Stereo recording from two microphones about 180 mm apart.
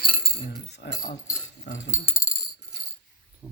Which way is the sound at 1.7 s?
75° left (ahead or behind).